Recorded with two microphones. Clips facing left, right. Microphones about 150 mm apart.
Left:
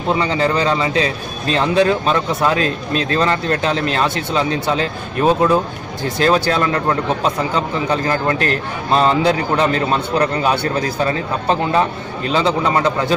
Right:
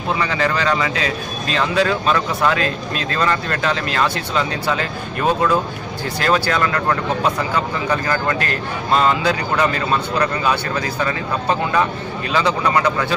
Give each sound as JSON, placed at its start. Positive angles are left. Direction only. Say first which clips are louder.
{"t": 0.1, "sound": "a man's voice", "louder": "left 3 dB", "side_deg": 25}